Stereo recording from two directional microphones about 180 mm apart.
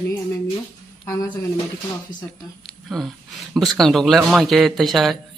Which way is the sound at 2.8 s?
5° right (ahead or behind).